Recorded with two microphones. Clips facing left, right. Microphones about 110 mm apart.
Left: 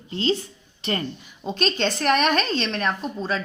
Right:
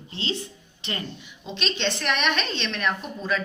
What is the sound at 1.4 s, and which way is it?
Speech, 45° left (ahead or behind).